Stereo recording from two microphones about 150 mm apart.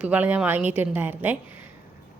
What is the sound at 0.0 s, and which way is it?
A woman's voice, 10° right (ahead or behind).